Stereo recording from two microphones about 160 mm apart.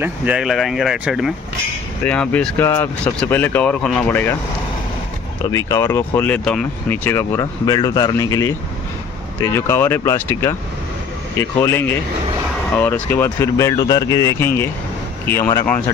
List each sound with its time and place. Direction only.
0.0 s speech: 10° right (ahead or behind)
2.0 s speech: 5° left (ahead or behind)
5.5 s speech: 20° left (ahead or behind)